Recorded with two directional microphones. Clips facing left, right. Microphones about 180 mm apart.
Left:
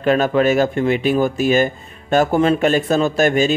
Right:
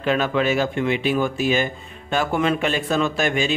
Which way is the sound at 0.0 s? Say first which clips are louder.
Left 5 dB; 45° left (ahead or behind).